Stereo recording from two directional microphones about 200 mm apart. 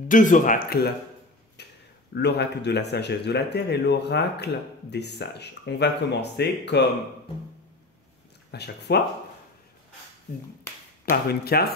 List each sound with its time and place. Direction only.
0.1 s speech: 40° left (ahead or behind)
1.6 s a sound: 55° left (ahead or behind)
2.1 s speech: 55° left (ahead or behind)
8.5 s speech: 55° left (ahead or behind)
11.1 s speech: 50° left (ahead or behind)